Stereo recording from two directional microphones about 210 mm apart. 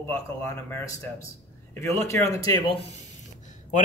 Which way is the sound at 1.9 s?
15° left (ahead or behind).